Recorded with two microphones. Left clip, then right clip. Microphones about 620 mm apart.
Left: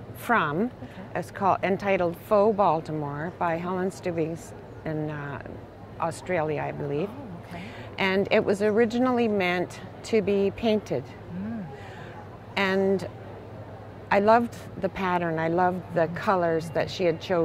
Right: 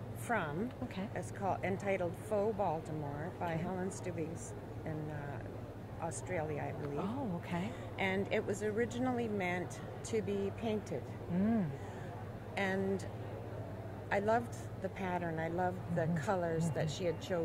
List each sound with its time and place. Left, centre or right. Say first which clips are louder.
0.3 s speech: left 13 dB; left
8.0 s speech: left 13 dB; left
12.5 s a woman's voice: left 12 dB; left